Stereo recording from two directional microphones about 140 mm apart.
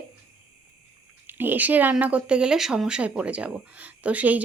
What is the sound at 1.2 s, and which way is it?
Speech, 15° right (ahead or behind).